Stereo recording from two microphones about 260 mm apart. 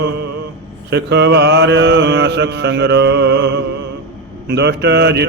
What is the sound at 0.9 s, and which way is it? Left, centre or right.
Mantra, right.